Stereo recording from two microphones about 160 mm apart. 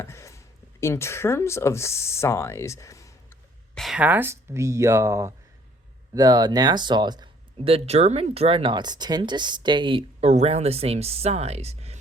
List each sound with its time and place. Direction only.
0.0 s speech: 15° left (ahead or behind)
3.8 s speech: 5° right (ahead or behind); by 11.9 s 40° right (ahead or behind)